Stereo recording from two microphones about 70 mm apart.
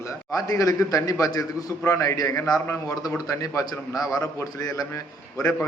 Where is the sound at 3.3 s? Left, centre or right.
Left.